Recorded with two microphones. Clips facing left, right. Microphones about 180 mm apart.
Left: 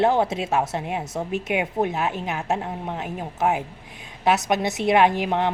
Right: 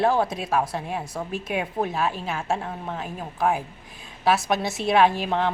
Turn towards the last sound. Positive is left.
turn(degrees=15)  # may be behind; listen again after turning